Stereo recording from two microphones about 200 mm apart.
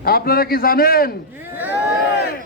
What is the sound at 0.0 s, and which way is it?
A man's voice, 50° left (ahead or behind).